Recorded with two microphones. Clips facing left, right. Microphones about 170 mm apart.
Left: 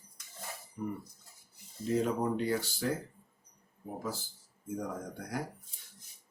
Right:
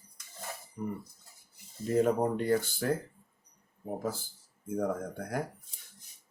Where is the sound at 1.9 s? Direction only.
50° right (ahead or behind).